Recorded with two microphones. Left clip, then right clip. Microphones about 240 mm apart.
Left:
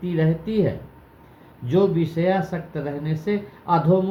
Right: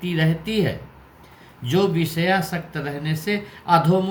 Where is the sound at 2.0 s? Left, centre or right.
Right.